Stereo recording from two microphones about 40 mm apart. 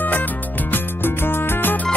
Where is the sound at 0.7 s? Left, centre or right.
Left.